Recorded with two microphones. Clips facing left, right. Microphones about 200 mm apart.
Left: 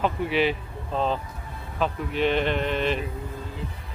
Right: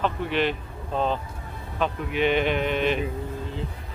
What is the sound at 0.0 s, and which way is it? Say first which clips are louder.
Speech: left 1 dB; 5° left (ahead or behind).